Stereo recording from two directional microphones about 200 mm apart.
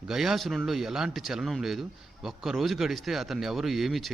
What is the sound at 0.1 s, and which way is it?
A man's voice, centre (ahead or behind).